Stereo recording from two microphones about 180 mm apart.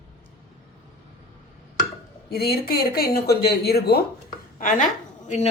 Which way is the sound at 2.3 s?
60° left (ahead or behind).